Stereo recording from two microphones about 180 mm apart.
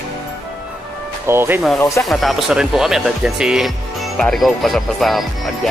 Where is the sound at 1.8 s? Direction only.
15° left (ahead or behind).